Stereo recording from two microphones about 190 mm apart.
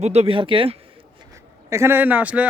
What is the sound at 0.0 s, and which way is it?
Speech, 35° right (ahead or behind).